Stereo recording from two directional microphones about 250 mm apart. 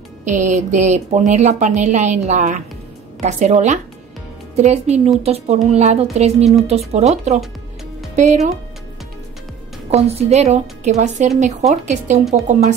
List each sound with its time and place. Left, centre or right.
0.2 s a woman's voice: right
9.8 s a woman's voice: right